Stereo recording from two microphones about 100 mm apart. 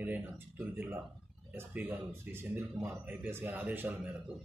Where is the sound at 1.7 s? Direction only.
15° right (ahead or behind).